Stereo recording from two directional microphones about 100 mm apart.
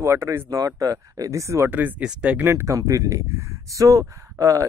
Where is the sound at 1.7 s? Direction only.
20° right (ahead or behind); by 4.6 s 35° right (ahead or behind).